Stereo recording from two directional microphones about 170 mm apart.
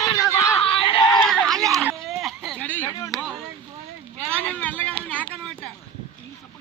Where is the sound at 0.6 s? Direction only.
35° left (ahead or behind).